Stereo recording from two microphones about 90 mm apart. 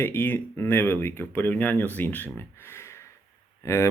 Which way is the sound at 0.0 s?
25° left (ahead or behind).